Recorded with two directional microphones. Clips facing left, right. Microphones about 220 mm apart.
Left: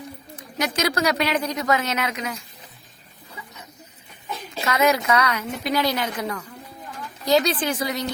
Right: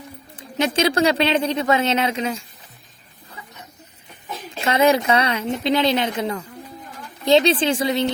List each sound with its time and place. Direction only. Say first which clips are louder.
0.3 s a woman's voice: right 5 dB; 25° right (ahead or behind)
4.6 s a woman's voice: right 4 dB; 30° right (ahead or behind)